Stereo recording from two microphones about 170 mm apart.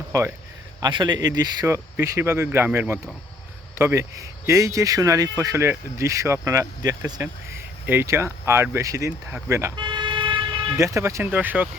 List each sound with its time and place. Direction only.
0.1 s speech: 15° right (ahead or behind)
10.8 s speech: 15° right (ahead or behind)